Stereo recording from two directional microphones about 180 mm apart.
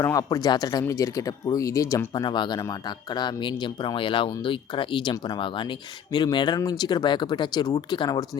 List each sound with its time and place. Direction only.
0.0 s speech: 20° left (ahead or behind)